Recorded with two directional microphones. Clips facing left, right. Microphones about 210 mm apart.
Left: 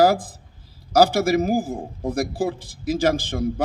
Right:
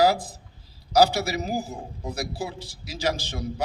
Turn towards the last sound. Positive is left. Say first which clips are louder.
# left 7 dB
turn(degrees=50)  # may be behind; listen again after turning